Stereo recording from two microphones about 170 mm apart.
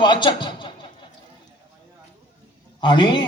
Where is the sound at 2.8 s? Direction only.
30° left (ahead or behind).